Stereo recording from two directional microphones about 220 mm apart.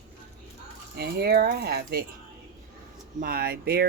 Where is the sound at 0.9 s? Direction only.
50° right (ahead or behind).